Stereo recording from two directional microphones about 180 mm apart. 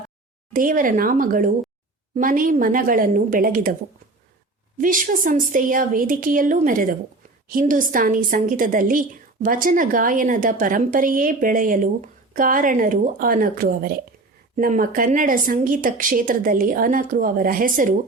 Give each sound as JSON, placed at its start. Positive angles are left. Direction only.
{"t": 0.5, "sound": "a woman's voice", "side_deg": -50}
{"t": 4.8, "sound": "a woman's voice", "side_deg": -50}